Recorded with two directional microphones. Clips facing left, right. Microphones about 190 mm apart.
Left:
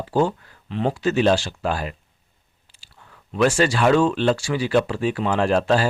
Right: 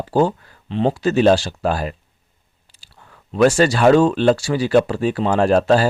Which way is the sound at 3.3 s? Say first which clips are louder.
Right 4 dB; 40° right (ahead or behind).